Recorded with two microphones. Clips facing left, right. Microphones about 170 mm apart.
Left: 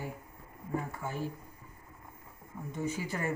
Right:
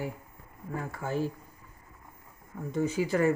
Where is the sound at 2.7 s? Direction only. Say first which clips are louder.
Right 8 dB; 90° right.